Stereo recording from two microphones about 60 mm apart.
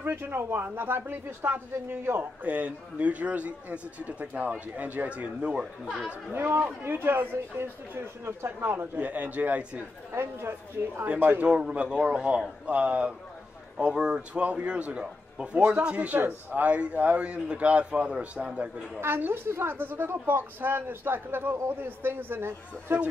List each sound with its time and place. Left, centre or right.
0.0 s a woman's voice: right
5.6 s speech: centre
6.3 s a woman's voice: right
10.1 s a woman's voice: right
11.4 s a man's voice: centre
18.9 s a woman's voice: right